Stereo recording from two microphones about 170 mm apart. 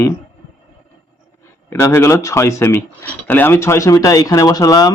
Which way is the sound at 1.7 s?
15° left (ahead or behind).